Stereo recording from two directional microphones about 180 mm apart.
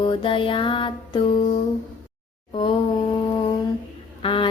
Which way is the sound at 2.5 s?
30° left (ahead or behind).